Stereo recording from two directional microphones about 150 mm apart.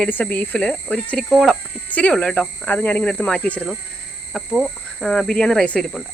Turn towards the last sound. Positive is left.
turn(degrees=5)  # may be behind; listen again after turning